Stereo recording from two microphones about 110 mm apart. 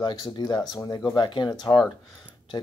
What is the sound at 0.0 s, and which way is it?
Speech, 45° left (ahead or behind).